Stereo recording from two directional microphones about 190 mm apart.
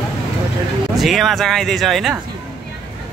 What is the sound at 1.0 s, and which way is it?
Speech, centre (ahead or behind).